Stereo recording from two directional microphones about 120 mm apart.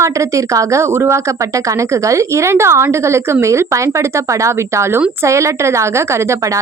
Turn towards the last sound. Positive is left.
turn(degrees=-25)  # may be behind; listen again after turning